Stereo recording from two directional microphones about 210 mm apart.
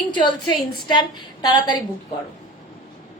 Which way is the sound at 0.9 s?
20° left (ahead or behind).